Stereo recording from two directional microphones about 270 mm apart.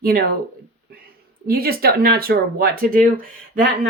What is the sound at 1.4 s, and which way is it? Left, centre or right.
A woman's voice, right.